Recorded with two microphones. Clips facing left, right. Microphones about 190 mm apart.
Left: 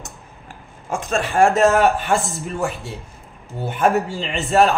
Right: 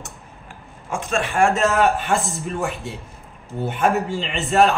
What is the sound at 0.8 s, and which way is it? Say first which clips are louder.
A man's voice: left 1 dB; 40° left (ahead or behind).